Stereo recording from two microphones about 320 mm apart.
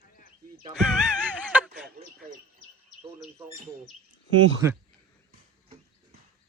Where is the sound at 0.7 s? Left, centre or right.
Centre.